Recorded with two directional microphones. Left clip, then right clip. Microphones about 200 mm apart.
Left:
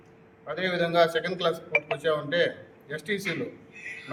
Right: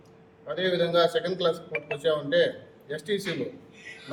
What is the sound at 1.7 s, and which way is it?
Speech, 50° left (ahead or behind).